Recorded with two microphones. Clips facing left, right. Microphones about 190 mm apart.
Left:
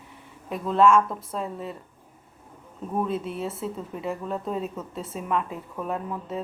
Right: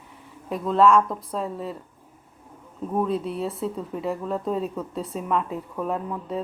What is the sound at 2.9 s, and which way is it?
Speech, centre (ahead or behind).